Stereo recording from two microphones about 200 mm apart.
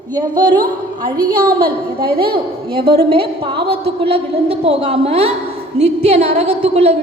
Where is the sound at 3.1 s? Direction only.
25° right (ahead or behind).